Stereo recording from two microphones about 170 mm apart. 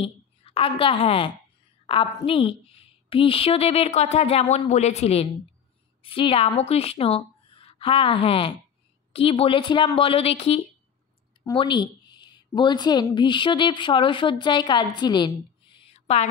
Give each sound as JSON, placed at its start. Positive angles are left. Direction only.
{"t": 0.0, "sound": "a woman's voice", "side_deg": 35}